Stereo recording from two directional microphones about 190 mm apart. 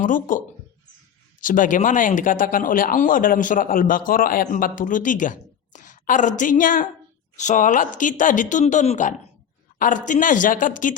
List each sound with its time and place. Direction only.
0.0 s speech: 45° left (ahead or behind)